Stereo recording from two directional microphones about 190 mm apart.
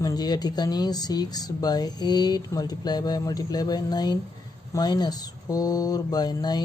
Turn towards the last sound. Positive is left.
turn(degrees=20)  # may be behind; listen again after turning